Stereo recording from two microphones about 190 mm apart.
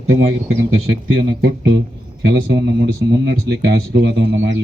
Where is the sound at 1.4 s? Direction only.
55° right (ahead or behind).